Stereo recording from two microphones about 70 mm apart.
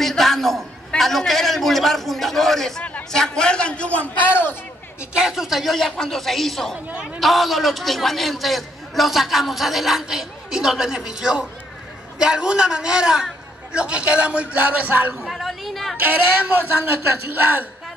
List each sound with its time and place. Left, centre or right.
0.0 s a man's voice: centre
2.8 s a sound: centre
3.1 s a man's voice: centre; by 4.6 s left
5.1 s a man's voice: centre
6.9 s a man's voice: centre
7.2 s a man's voice: centre; by 15.1 s right
15.2 s chatter: centre
16.0 s a man's voice: right